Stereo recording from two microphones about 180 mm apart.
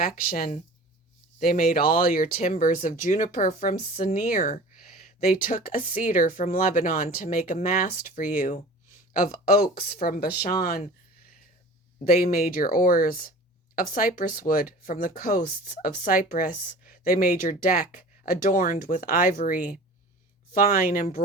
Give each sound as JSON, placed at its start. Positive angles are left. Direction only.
{"t": 0.0, "sound": "speech", "side_deg": 55}
{"t": 12.0, "sound": "speech", "side_deg": 55}